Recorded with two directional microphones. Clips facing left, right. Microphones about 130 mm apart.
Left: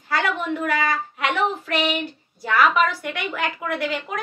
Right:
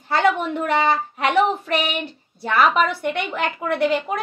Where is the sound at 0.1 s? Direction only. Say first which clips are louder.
Right 4 dB; 30° right (ahead or behind).